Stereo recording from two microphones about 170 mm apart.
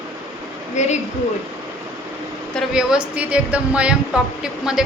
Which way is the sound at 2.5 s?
5° right (ahead or behind).